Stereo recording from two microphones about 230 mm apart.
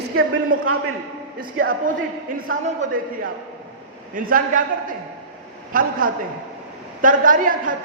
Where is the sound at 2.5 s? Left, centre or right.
Right.